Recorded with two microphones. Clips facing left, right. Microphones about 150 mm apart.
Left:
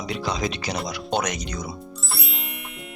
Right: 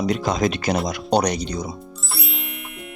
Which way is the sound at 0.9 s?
40° right (ahead or behind).